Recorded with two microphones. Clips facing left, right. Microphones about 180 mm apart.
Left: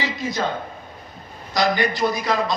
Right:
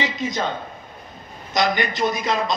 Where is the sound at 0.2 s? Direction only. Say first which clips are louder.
Right 1 dB; 20° right (ahead or behind).